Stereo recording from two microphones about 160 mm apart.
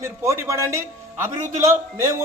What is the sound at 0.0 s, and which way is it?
A man's voice, 15° right (ahead or behind).